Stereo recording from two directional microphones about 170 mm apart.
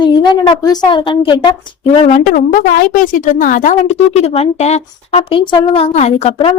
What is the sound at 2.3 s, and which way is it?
Speech, 50° left (ahead or behind).